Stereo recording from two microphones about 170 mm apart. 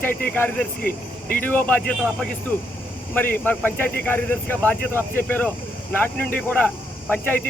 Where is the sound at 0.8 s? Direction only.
60° left (ahead or behind).